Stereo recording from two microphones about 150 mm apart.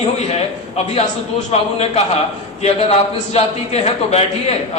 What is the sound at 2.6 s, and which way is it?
A man's voice, 40° left (ahead or behind).